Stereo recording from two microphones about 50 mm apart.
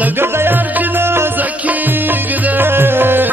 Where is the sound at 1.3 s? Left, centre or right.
Right.